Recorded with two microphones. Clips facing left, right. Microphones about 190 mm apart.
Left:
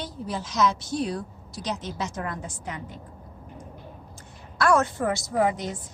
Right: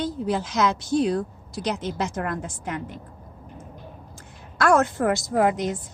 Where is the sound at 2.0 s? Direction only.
55° right (ahead or behind).